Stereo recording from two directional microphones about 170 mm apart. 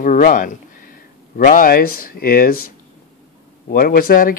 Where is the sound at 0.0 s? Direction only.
50° left (ahead or behind).